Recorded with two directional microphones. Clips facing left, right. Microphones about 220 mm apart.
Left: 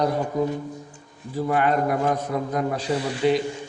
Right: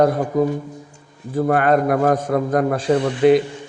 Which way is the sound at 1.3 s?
55° right (ahead or behind).